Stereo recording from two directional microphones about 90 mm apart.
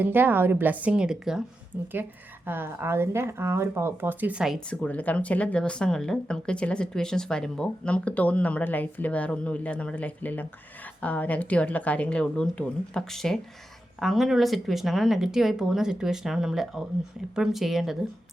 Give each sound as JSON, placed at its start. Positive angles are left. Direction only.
{"t": 0.0, "sound": "speech", "side_deg": -20}
{"t": 2.5, "sound": "speech", "side_deg": -25}
{"t": 4.3, "sound": "speech", "side_deg": -10}
{"t": 4.7, "sound": "speech", "side_deg": 15}